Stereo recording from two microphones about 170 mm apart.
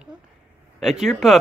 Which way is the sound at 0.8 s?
Centre (ahead or behind).